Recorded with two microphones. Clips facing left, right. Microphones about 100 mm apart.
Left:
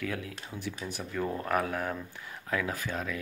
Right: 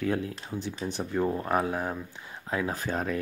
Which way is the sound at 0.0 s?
30° right (ahead or behind).